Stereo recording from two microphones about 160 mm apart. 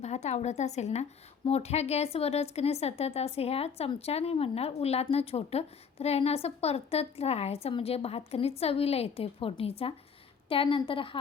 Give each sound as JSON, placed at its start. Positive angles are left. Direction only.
{"t": 0.0, "sound": "a woman's voice", "side_deg": 45}